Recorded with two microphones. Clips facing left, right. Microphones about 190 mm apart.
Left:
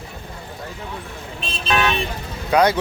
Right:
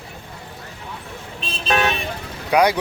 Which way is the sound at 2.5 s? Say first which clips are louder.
Even; 15° right (ahead or behind).